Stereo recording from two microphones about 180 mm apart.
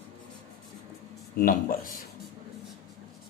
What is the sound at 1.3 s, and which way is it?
Speech, 50° left (ahead or behind).